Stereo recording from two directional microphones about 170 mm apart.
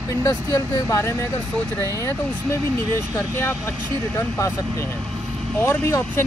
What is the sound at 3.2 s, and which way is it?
Speech, 15° left (ahead or behind).